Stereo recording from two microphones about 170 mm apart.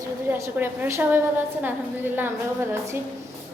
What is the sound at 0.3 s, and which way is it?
Speech, 15° right (ahead or behind).